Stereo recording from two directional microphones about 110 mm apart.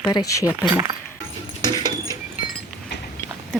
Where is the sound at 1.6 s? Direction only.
35° right (ahead or behind).